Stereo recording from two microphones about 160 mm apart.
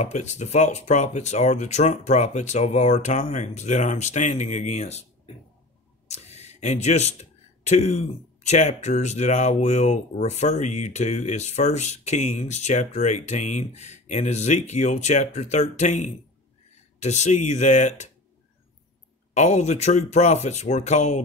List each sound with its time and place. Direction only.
0.0 s speech: 50° left (ahead or behind)
19.3 s speech: 45° left (ahead or behind)